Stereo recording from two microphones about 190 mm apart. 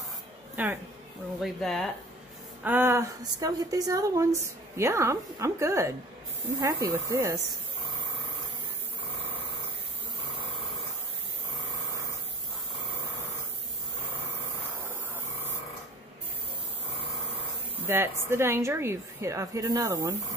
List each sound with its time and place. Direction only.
0.6 s a woman's voice: 10° right (ahead or behind)
1.4 s speech: centre (ahead or behind)
2.6 s a woman's voice: 10° right (ahead or behind)
17.7 s a woman's voice: 10° right (ahead or behind)